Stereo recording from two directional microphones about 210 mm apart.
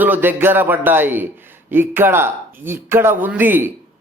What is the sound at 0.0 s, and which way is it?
A man's voice, 10° right (ahead or behind).